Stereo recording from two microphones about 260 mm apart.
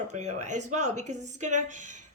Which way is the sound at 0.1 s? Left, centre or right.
Right.